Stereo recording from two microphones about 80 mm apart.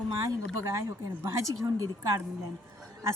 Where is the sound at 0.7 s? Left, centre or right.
Right.